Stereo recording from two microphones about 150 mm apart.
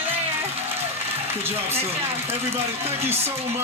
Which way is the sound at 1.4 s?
15° right (ahead or behind).